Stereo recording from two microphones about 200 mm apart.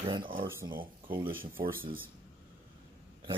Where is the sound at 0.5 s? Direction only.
10° right (ahead or behind).